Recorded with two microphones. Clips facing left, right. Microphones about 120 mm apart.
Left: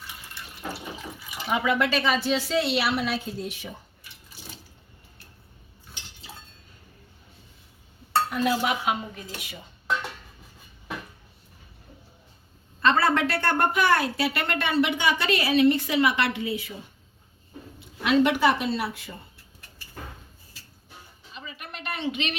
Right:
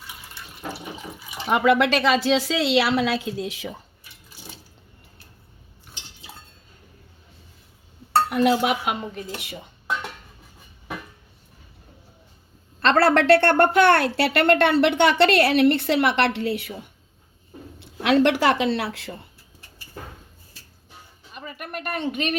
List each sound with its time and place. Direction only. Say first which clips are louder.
1.5 s a woman's voice: right 6 dB; 70° right (ahead or behind); by 3.8 s 90° right
8.3 s a woman's voice: right 7 dB; 70° right (ahead or behind)
12.8 s a woman's voice: right 4 dB; 70° right (ahead or behind)
17.7 s speech: right 3 dB; 75° right (ahead or behind)
21.3 s speech: right 6 dB; 55° right (ahead or behind)